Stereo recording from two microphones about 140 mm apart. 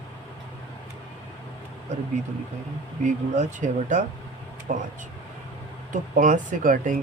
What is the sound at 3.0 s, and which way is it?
Speech, 60° right (ahead or behind).